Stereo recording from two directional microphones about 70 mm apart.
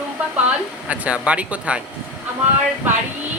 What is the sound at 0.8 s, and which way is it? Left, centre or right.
Speech, centre.